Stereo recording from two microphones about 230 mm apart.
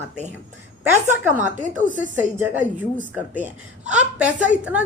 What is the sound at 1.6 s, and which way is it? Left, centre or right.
Speech, right.